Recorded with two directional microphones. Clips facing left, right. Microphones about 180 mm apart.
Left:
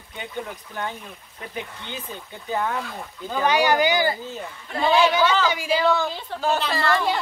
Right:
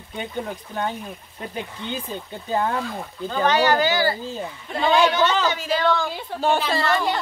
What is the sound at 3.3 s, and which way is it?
Speech, 10° left (ahead or behind).